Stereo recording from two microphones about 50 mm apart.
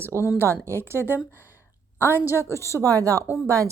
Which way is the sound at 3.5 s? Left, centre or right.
Right.